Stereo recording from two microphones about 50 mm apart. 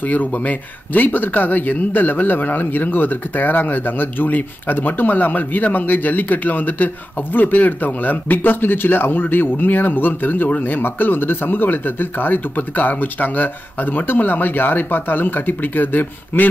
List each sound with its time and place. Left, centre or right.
0.0 s speech: left